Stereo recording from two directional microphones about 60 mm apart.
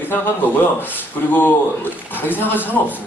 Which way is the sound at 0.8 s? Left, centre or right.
Left.